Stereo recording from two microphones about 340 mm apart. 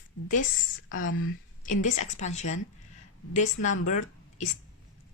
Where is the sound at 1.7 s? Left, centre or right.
Left.